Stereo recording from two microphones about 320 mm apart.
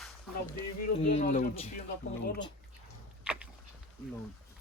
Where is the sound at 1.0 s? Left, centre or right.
Left.